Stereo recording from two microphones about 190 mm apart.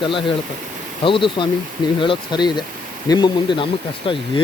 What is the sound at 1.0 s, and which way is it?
Speech, 25° left (ahead or behind).